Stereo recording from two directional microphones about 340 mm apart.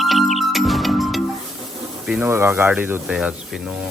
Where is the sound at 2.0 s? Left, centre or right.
Centre.